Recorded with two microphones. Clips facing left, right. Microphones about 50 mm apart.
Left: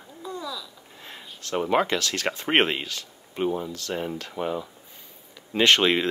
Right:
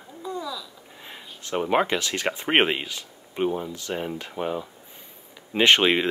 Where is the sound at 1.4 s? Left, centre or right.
Centre.